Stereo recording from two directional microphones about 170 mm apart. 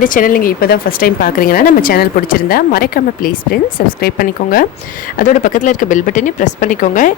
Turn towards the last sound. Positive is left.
turn(degrees=50)  # may be behind; listen again after turning